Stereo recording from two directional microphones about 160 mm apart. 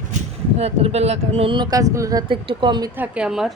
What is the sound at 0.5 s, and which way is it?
Speech, 40° right (ahead or behind).